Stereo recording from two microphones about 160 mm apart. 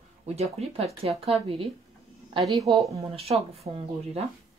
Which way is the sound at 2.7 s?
30° right (ahead or behind).